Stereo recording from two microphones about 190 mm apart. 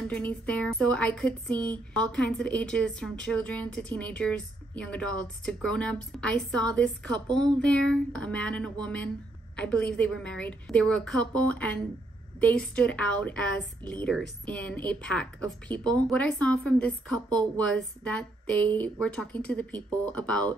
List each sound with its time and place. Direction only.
0.1 s speech: 5° left (ahead or behind)